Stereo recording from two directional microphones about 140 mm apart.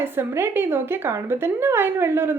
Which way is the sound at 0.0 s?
15° right (ahead or behind).